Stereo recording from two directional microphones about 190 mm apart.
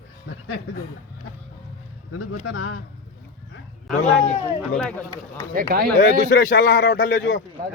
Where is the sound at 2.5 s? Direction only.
90° left.